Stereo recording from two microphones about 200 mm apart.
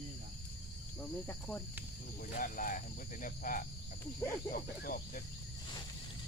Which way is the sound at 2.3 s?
45° left (ahead or behind).